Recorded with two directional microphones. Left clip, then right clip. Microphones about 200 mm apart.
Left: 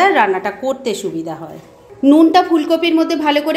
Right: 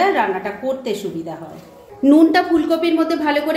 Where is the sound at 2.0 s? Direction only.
20° left (ahead or behind).